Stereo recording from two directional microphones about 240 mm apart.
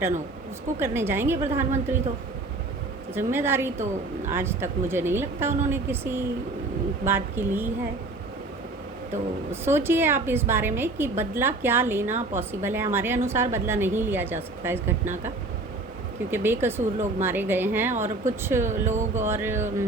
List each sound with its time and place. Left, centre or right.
0.8 s a woman's voice: centre
3.2 s a woman's voice: centre
9.5 s a woman's voice: centre
16.3 s a woman's voice: centre
18.6 s speech: right
19.1 s a woman's voice: centre